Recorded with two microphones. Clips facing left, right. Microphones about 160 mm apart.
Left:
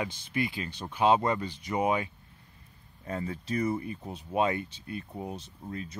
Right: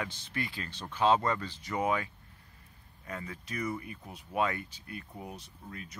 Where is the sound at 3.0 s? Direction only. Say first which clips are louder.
Left 7 dB; 30° left (ahead or behind).